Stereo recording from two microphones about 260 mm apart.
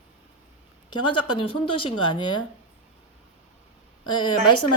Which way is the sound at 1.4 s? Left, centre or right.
Centre.